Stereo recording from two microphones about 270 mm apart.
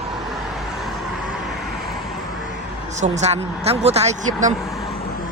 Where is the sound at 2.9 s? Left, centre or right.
Right.